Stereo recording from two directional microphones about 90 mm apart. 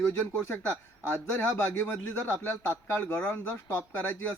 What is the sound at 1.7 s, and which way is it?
Speech, 25° left (ahead or behind).